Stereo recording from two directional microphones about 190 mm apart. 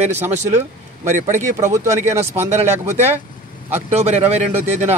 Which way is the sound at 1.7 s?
15° right (ahead or behind).